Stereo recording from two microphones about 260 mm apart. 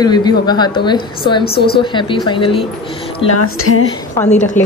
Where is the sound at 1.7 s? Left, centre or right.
Centre.